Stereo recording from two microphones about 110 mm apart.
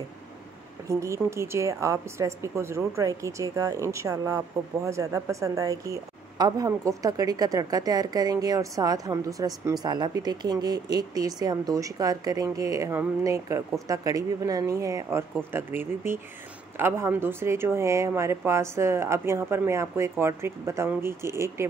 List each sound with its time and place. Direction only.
0.8 s a woman's voice: 25° right (ahead or behind)